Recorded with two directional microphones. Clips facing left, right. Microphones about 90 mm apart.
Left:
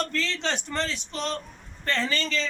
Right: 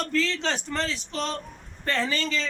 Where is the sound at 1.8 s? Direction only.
10° right (ahead or behind).